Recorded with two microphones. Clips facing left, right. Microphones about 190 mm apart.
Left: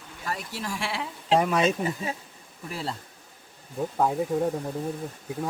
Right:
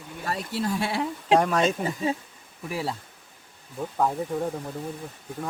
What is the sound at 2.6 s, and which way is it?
Speech, 10° right (ahead or behind).